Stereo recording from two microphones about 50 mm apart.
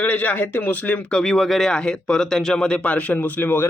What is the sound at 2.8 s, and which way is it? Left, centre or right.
Speech, left.